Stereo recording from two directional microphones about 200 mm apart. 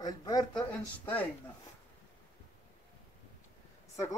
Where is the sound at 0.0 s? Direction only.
20° left (ahead or behind).